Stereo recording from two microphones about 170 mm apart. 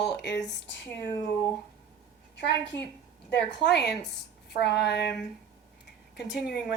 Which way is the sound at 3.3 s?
90° left.